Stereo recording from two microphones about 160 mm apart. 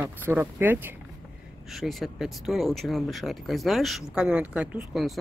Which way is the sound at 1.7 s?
Centre (ahead or behind).